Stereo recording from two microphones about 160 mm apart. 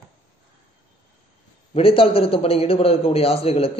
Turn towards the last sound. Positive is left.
turn(degrees=40)  # may be behind; listen again after turning